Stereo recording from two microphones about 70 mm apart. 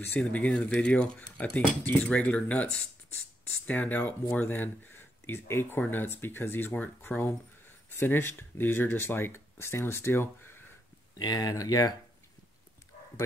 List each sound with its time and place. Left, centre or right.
0.2 s speech: centre
11.1 s speech: left